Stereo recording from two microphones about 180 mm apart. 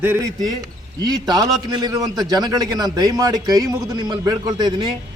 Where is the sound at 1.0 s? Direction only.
20° right (ahead or behind).